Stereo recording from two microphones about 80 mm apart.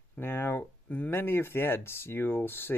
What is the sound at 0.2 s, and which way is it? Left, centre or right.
Speech, left.